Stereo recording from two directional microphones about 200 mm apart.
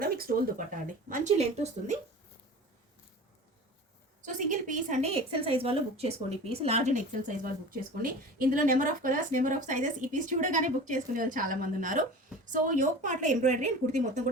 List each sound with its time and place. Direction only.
0.0 s a sound: 50° right (ahead or behind)
1.0 s a woman's voice: 40° right (ahead or behind)
4.3 s a woman's voice: 40° right (ahead or behind)